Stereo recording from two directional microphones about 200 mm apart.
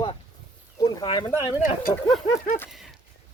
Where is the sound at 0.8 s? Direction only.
20° left (ahead or behind).